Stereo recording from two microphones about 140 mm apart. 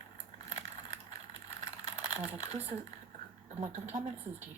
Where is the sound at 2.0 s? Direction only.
50° right (ahead or behind).